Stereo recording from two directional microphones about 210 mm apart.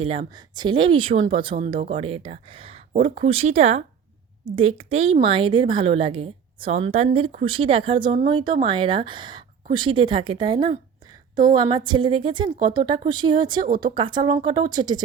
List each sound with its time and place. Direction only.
0.0 s a woman's voice: 30° right (ahead or behind)